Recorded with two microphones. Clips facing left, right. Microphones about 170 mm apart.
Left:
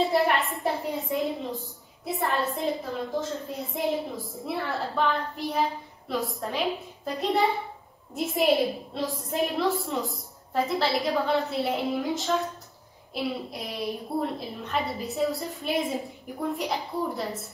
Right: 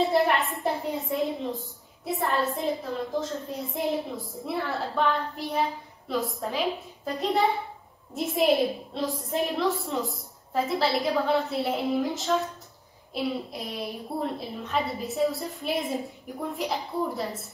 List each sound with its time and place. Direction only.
0.0 s a woman's voice: centre (ahead or behind)